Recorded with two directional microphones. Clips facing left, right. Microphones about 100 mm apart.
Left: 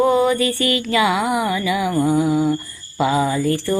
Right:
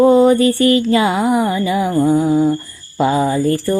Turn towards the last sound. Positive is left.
turn(degrees=-35)  # may be behind; listen again after turning